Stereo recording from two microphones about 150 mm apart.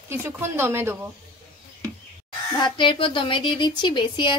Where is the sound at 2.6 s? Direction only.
35° left (ahead or behind).